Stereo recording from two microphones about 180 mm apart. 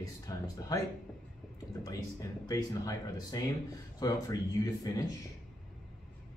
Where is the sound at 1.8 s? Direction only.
20° left (ahead or behind).